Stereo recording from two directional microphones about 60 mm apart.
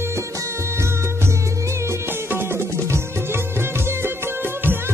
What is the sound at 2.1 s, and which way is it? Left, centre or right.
Music, right.